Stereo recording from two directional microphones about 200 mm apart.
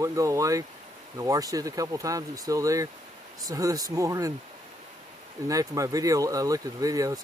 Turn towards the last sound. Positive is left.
turn(degrees=-15)  # may be behind; listen again after turning